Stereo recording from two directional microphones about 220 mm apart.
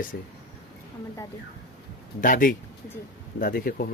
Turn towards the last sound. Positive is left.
turn(degrees=40)  # may be behind; listen again after turning